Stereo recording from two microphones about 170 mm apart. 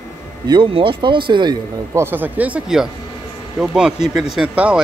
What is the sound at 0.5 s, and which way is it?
Speech, 30° right (ahead or behind).